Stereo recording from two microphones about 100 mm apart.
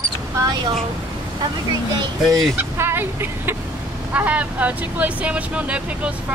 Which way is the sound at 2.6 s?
20° right (ahead or behind).